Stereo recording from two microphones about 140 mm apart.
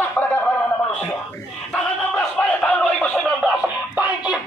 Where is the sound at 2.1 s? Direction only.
10° left (ahead or behind).